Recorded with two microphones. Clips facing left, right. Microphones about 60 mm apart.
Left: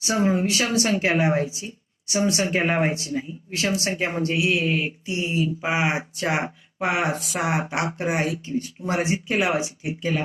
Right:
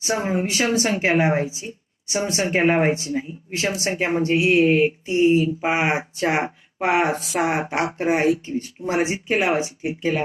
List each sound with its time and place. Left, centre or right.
0.0 s speech: right